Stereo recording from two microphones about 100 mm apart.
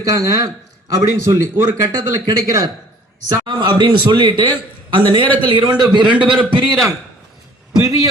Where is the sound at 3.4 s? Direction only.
50° right (ahead or behind).